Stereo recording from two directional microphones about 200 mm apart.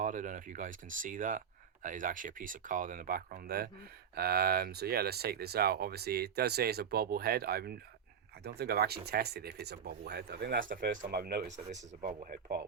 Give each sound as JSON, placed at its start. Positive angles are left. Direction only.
{"t": 0.0, "sound": "speech", "side_deg": -40}